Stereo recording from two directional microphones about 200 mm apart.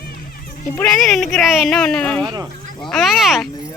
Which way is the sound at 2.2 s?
20° right (ahead or behind).